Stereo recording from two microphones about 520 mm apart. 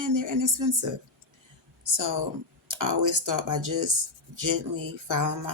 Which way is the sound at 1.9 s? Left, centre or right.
Right.